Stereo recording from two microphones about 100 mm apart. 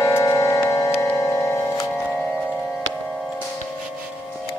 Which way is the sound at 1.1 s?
35° left (ahead or behind).